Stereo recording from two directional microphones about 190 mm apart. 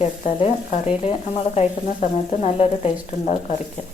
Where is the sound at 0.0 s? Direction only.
35° left (ahead or behind).